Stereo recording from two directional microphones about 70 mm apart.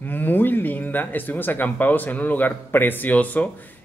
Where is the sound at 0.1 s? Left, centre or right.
Left.